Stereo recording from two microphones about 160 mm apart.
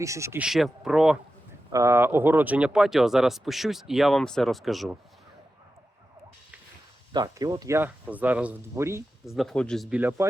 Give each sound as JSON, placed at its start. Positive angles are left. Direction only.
{"t": 0.0, "sound": "speech", "side_deg": -20}
{"t": 0.4, "sound": "speech", "side_deg": 0}
{"t": 1.7, "sound": "speech", "side_deg": -15}
{"t": 7.1, "sound": "speech", "side_deg": -25}
{"t": 9.2, "sound": "speech", "side_deg": 0}
{"t": 10.0, "sound": "speech", "side_deg": -10}